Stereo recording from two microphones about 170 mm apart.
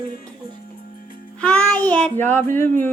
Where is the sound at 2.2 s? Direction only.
10° left (ahead or behind).